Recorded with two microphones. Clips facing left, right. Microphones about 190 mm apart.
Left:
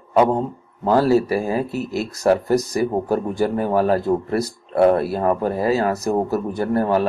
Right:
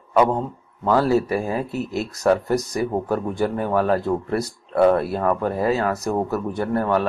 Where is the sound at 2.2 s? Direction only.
35° left (ahead or behind).